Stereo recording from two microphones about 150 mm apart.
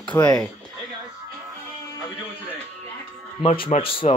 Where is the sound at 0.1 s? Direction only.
15° left (ahead or behind).